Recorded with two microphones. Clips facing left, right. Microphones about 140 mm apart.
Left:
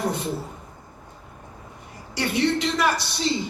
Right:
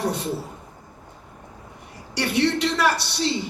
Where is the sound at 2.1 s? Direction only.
75° right (ahead or behind).